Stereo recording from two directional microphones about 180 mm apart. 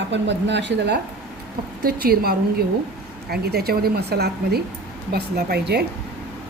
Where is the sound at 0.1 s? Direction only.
80° right; by 5.8 s 65° right (ahead or behind).